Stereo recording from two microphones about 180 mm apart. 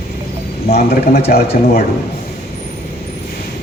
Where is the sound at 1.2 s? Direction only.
60° left (ahead or behind).